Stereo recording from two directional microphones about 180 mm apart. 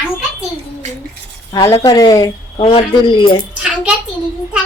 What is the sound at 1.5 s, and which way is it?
A woman's voice, 20° left (ahead or behind).